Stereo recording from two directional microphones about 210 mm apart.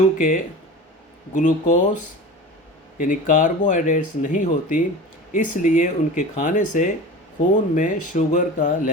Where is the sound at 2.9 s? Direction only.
40° left (ahead or behind).